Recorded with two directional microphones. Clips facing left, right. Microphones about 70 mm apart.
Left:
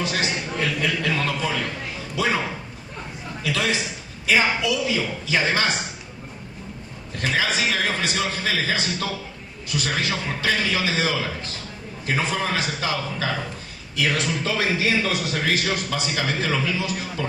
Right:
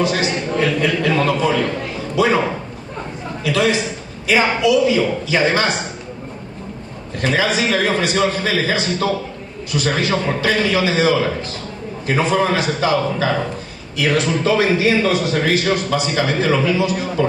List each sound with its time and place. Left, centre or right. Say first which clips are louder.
0.1 s a man's voice: right 6 dB; right
1.5 s a man's voice: right 8 dB; right
1.7 s a man's voice: right 9 dB; right
7.2 s a man's voice: right 5 dB; right
9.8 s a man's voice: right 8 dB; right
16.9 s a man's voice: right 9 dB; right